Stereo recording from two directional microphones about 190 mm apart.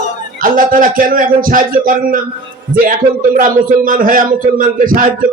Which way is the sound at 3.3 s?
45° right (ahead or behind).